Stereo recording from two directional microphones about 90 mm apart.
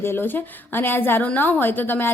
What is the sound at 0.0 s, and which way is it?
A woman's voice, 25° left (ahead or behind).